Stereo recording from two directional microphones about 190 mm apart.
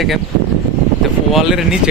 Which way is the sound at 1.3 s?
Centre (ahead or behind).